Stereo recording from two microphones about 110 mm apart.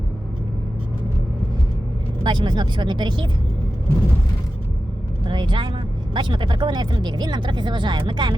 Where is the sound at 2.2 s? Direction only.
45° right (ahead or behind).